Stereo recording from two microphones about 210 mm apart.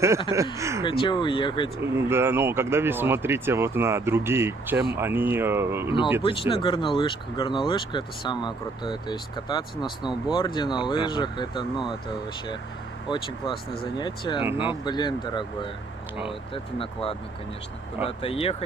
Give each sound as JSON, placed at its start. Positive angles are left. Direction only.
{"t": 0.3, "sound": "speech", "side_deg": -15}
{"t": 0.8, "sound": "speech", "side_deg": 20}
{"t": 2.0, "sound": "speech", "side_deg": -10}
{"t": 6.2, "sound": "speech", "side_deg": 25}
{"t": 13.1, "sound": "speech", "side_deg": 20}